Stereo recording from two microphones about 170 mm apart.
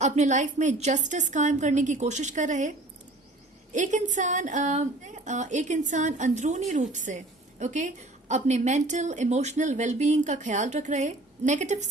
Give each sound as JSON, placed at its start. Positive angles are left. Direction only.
{"t": 0.0, "sound": "a woman's voice", "side_deg": -45}